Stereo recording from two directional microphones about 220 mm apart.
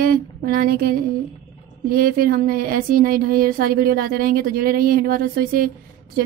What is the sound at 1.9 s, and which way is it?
A woman's voice, 40° right (ahead or behind).